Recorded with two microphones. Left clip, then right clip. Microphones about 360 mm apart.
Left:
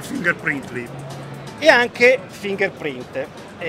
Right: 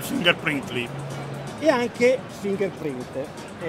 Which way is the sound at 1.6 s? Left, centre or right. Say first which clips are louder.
Left 7 dB; left.